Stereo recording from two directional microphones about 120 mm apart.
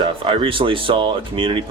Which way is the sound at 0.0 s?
45° right (ahead or behind).